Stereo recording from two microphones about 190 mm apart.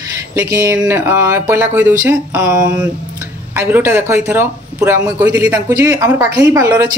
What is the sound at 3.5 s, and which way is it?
Speech, 10° right (ahead or behind).